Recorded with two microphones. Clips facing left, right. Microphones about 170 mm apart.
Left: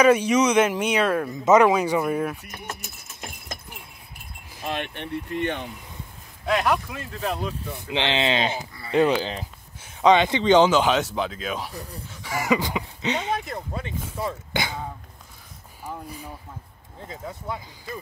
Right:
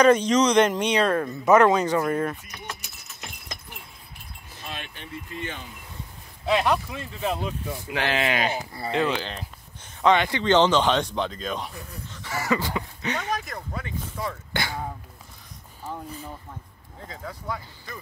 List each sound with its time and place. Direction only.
0.0 s speech: 10° left (ahead or behind)
2.4 s a sound: 50° left (ahead or behind)
4.6 s speech: 65° left (ahead or behind)
6.4 s speech: centre (ahead or behind)
7.9 s speech: 25° left (ahead or behind)
8.9 s speech: 40° left (ahead or behind)
9.2 s speech: 5° left (ahead or behind)
10.0 s speech: 20° left (ahead or behind); by 11.7 s 5° left (ahead or behind)
11.7 s speech: 35° left (ahead or behind)
12.1 s speech: 10° left (ahead or behind)
17.0 s speech: 20° left (ahead or behind)